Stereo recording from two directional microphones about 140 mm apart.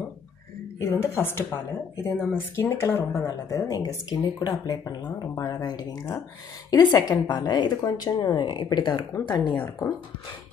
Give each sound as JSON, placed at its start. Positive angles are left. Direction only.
{"t": 0.7, "sound": "a woman's voice", "side_deg": 20}